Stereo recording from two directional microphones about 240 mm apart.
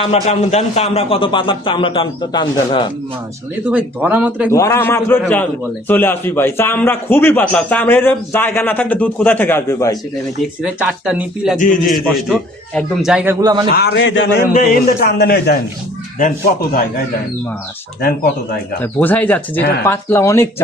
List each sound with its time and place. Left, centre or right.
0.0 s a man's voice: left
3.7 s speech: centre
4.5 s a man's voice: centre
10.6 s speech: centre
11.6 s a man's voice: left
12.3 s speech: centre
13.4 s speech: centre
13.7 s a man's voice: left
18.8 s a man's voice: centre